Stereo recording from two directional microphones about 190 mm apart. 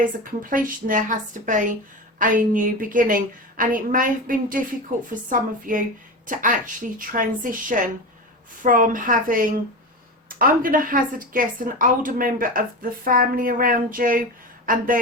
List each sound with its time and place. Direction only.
0.5 s a woman's voice: 45° right (ahead or behind)